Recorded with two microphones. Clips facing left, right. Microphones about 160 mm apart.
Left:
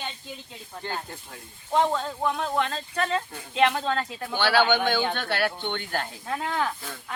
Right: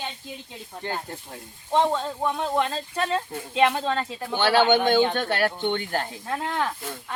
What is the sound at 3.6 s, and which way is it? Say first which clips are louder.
Speech: right 1 dB; 5° right (ahead or behind).